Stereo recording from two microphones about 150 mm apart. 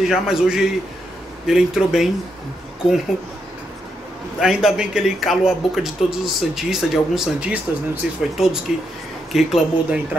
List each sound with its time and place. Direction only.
0.0 s a man's voice: 5° right (ahead or behind)
4.4 s a man's voice: 5° right (ahead or behind)